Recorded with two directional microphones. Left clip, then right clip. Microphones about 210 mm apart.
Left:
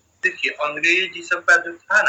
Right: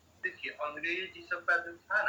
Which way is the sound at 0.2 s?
45° left (ahead or behind).